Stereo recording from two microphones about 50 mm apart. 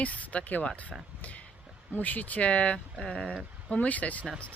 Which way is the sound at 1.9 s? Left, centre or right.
Left.